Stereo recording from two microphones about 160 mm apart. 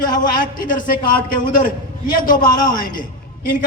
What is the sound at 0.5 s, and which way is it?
A man's voice, 60° left (ahead or behind).